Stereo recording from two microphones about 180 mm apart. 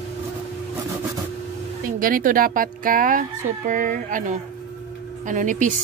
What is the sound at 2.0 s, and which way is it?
Speech, 50° right (ahead or behind).